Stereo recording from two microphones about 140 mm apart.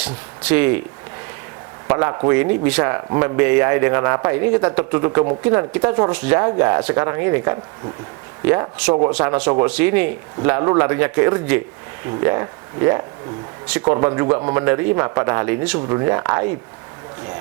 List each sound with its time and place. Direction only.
0.0 s speech: 10° right (ahead or behind)
1.9 s speech: 20° right (ahead or behind)
9.1 s speech: 15° right (ahead or behind)